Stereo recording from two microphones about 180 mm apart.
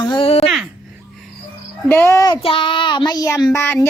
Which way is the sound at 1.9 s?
15° left (ahead or behind).